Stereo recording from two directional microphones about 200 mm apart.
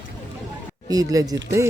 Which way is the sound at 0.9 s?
20° right (ahead or behind).